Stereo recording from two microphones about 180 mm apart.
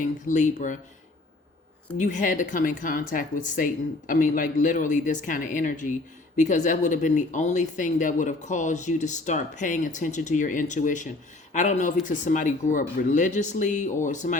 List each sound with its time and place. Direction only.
0.0 s speech: 45° left (ahead or behind)
2.0 s speech: 45° left (ahead or behind)